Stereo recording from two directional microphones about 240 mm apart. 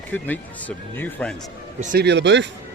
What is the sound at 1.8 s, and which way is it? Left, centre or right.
Speech, right.